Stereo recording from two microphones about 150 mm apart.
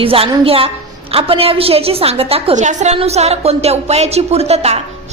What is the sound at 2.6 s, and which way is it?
A woman's voice, 55° right (ahead or behind).